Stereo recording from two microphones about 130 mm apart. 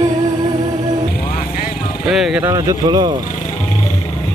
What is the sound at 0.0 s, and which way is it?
Music, 35° right (ahead or behind).